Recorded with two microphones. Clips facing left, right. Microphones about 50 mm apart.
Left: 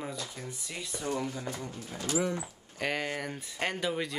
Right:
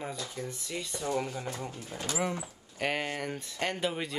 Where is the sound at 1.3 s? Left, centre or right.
Right.